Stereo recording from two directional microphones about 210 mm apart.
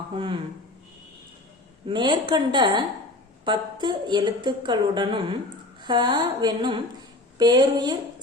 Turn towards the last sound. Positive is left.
turn(degrees=-20)  # may be behind; listen again after turning